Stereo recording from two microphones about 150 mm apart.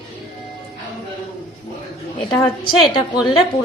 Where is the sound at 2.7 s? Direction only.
30° left (ahead or behind).